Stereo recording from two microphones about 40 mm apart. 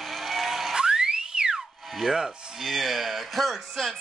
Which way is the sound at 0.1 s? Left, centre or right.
Centre.